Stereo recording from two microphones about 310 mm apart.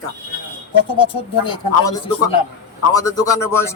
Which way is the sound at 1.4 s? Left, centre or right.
Centre.